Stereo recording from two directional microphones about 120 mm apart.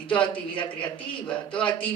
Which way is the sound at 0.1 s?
45° left (ahead or behind).